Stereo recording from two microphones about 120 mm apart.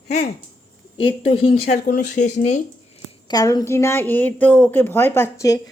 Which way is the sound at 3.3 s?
30° left (ahead or behind).